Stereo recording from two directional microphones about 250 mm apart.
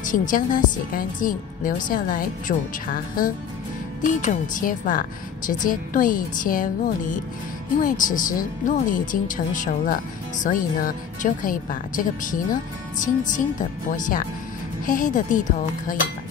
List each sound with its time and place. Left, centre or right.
0.0 s speech: left